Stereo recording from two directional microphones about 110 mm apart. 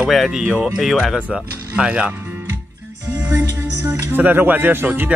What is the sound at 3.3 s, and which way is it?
Music, 25° right (ahead or behind).